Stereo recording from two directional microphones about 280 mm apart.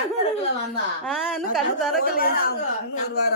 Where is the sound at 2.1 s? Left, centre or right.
Left.